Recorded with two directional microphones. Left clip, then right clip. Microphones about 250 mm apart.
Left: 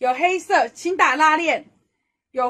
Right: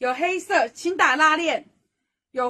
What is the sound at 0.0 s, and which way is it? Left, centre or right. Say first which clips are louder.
A woman's voice: left 4 dB; centre.